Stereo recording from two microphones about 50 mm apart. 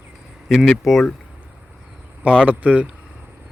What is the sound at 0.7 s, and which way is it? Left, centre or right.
Speech, centre.